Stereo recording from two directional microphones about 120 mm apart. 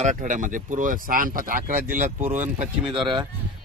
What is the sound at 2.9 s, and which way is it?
Speech, 40° right (ahead or behind).